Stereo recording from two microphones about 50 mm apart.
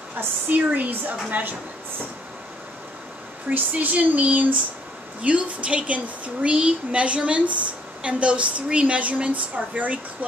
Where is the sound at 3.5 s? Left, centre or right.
Right.